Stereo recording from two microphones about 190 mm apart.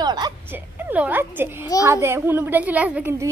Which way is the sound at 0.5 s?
10° right (ahead or behind).